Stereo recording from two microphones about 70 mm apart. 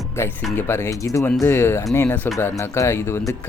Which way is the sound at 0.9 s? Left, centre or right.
Left.